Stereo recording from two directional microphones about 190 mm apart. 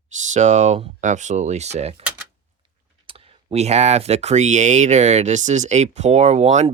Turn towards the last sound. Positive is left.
turn(degrees=-35)  # may be behind; listen again after turning